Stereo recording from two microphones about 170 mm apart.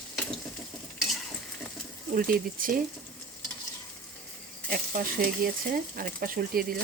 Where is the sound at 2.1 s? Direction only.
55° right (ahead or behind).